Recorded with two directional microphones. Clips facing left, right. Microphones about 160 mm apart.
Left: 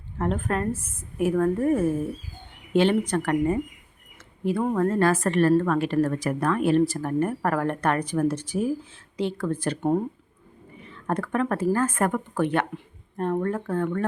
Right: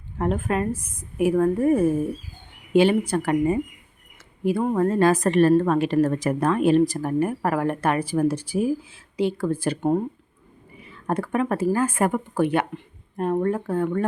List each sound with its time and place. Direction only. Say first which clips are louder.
0.2 s a woman's voice: right 2 dB; 10° right (ahead or behind)